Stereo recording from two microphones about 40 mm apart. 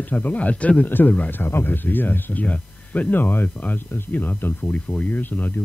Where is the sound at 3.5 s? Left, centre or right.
Left.